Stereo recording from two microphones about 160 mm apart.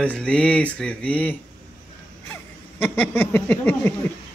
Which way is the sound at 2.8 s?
10° left (ahead or behind).